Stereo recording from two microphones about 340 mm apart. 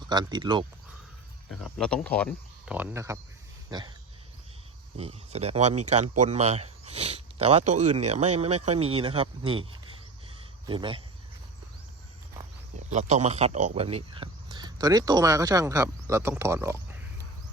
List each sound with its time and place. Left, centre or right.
0.1 s speech: centre
1.5 s speech: centre
3.7 s a sound: centre
4.9 s speech: centre
10.7 s speech: centre
12.9 s speech: centre